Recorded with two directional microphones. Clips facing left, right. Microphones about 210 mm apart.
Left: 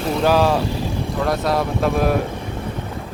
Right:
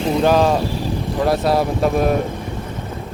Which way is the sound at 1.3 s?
30° right (ahead or behind).